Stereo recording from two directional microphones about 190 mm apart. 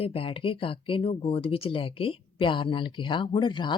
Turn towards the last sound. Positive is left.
turn(degrees=25)  # may be behind; listen again after turning